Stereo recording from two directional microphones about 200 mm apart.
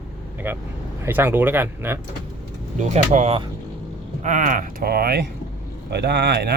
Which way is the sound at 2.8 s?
35° right (ahead or behind).